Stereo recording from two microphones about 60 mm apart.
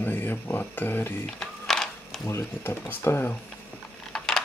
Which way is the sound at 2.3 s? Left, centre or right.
Left.